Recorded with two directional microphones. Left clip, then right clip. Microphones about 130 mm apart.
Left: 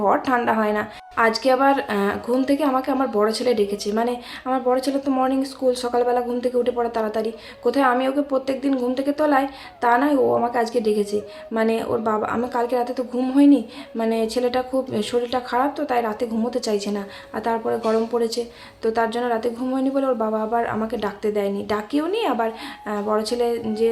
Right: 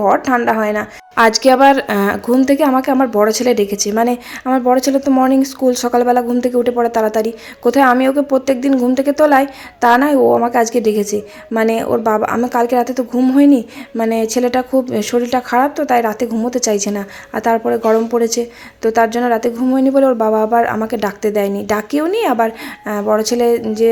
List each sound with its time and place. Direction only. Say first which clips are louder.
0.0 s speech: right 6 dB; 30° right (ahead or behind)
1.1 s a woman's voice: right 8 dB; 70° right (ahead or behind); by 23.9 s 55° right (ahead or behind)